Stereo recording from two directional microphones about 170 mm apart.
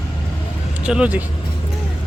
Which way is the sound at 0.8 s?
5° right (ahead or behind).